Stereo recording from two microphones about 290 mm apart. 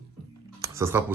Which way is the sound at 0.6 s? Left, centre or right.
Centre.